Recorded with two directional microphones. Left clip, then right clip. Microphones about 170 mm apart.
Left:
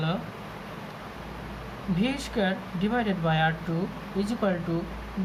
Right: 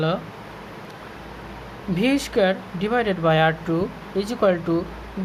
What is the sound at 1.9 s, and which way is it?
Speech, 55° right (ahead or behind).